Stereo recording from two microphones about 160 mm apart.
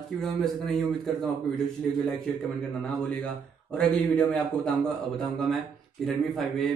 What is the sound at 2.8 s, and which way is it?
A man's voice, 5° left (ahead or behind).